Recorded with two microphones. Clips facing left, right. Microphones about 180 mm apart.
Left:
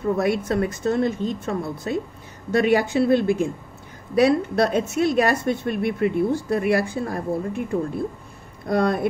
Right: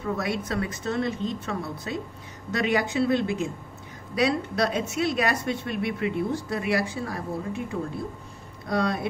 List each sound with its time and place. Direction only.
0.2 s a woman's voice: 50° left (ahead or behind)
8.6 s a woman's voice: 55° left (ahead or behind)